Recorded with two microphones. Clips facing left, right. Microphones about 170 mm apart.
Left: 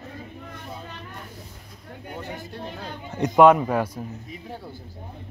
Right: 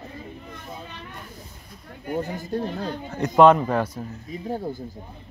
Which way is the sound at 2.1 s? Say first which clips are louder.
Right 9 dB; 45° right (ahead or behind).